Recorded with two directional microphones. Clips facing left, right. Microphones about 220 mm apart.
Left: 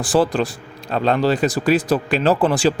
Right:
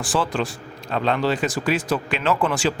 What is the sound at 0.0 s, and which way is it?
A man's voice, 35° left (ahead or behind).